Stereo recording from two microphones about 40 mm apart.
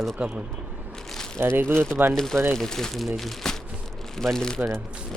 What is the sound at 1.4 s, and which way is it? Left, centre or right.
Speech, right.